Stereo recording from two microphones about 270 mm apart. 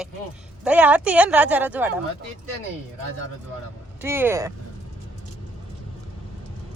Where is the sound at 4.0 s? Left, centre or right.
Centre.